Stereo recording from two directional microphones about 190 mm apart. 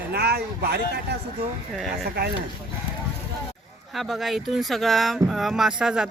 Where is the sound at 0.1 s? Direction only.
55° right (ahead or behind).